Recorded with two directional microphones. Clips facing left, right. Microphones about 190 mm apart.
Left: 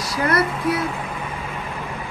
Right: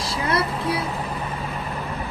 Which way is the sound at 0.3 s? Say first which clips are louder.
Left 3 dB; 30° right (ahead or behind).